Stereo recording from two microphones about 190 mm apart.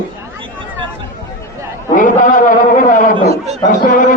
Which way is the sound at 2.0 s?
45° left (ahead or behind).